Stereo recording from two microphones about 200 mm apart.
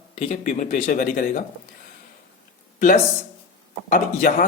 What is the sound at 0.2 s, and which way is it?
Speech, 35° left (ahead or behind).